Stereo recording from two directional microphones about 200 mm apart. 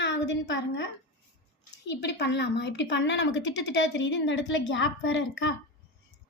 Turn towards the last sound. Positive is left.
turn(degrees=65)  # may be behind; listen again after turning